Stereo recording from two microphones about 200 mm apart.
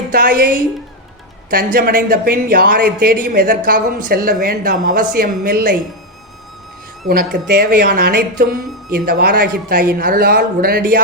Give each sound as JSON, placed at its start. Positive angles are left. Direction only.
{"t": 0.1, "sound": "a woman's voice", "side_deg": -45}
{"t": 7.1, "sound": "a woman's voice", "side_deg": -50}